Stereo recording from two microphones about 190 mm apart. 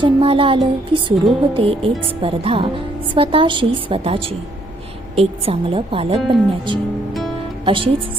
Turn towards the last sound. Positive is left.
turn(degrees=-25)  # may be behind; listen again after turning